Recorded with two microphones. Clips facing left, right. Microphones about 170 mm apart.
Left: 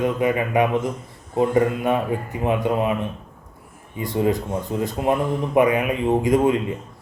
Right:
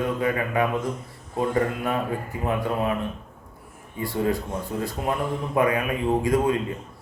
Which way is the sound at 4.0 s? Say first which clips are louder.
Left 4 dB; 20° left (ahead or behind).